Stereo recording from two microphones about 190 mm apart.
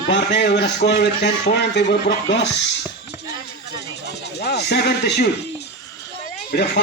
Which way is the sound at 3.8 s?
60° left (ahead or behind).